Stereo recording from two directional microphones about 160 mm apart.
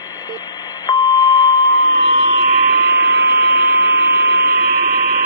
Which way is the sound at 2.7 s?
90° right.